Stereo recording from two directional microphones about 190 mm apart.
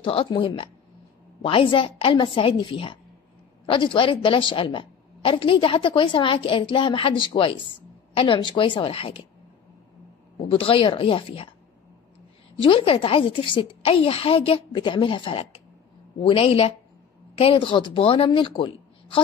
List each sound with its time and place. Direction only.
0.0 s a woman's voice: 30° left (ahead or behind)
10.4 s a woman's voice: 30° left (ahead or behind)
12.5 s a woman's voice: 25° left (ahead or behind)